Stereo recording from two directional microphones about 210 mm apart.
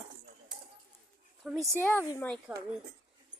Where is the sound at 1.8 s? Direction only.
10° left (ahead or behind).